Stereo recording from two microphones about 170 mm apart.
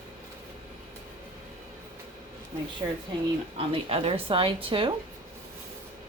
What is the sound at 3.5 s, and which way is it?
A woman's voice, 35° right (ahead or behind).